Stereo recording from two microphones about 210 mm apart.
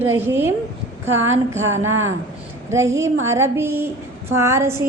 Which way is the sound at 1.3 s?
70° right (ahead or behind).